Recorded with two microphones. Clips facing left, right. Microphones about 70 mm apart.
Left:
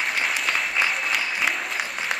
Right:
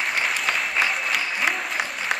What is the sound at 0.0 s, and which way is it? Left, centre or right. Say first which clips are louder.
Applause: right 1 dB; centre.